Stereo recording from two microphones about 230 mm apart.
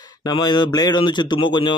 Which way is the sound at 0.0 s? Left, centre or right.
Centre.